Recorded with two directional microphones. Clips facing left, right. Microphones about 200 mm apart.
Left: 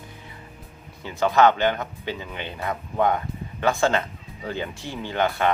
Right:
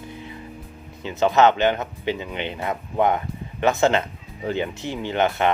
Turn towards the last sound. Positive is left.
turn(degrees=-20)  # may be behind; listen again after turning